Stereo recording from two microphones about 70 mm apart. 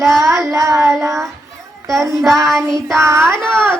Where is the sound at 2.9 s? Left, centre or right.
Right.